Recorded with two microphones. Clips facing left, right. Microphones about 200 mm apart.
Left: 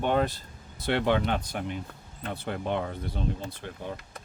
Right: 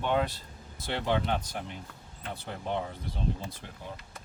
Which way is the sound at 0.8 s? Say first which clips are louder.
Left 5 dB; 65° left (ahead or behind).